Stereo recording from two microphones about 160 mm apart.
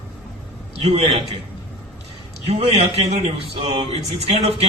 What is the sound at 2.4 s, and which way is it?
A man's voice, 40° right (ahead or behind).